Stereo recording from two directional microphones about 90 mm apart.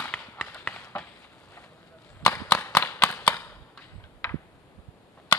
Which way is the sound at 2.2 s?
20° left (ahead or behind).